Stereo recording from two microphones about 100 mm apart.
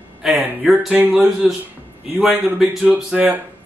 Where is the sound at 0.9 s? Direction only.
15° right (ahead or behind).